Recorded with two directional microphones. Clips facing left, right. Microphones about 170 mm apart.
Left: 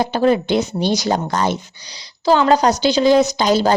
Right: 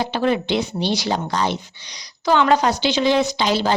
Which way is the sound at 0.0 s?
40° left (ahead or behind).